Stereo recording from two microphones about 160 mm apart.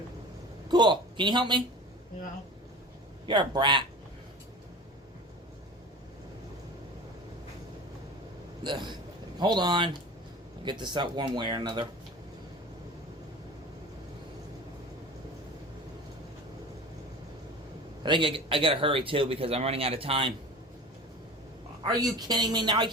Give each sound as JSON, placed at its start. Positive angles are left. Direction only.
{"t": 0.7, "sound": "a sound", "side_deg": -30}
{"t": 3.2, "sound": "speech", "side_deg": -30}
{"t": 8.6, "sound": "speech", "side_deg": -30}
{"t": 18.0, "sound": "a man's voice", "side_deg": -30}
{"t": 21.8, "sound": "speech", "side_deg": -25}